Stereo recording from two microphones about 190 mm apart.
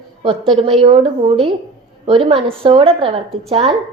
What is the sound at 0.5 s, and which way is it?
A woman's voice, 30° right (ahead or behind).